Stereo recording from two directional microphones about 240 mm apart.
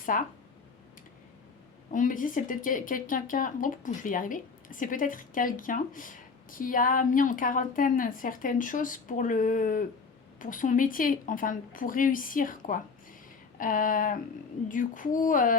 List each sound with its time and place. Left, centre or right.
0.1 s speech: left
1.9 s speech: left